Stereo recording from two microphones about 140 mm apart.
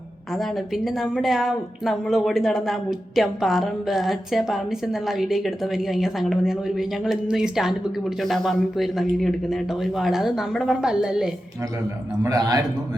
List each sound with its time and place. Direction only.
0.3 s a woman's voice: centre (ahead or behind)
12.2 s a man's voice: 25° right (ahead or behind)